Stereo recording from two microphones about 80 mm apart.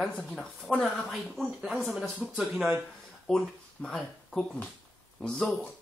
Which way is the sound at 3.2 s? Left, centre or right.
Centre.